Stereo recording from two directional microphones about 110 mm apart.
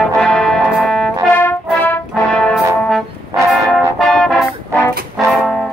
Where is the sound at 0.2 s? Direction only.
5° left (ahead or behind).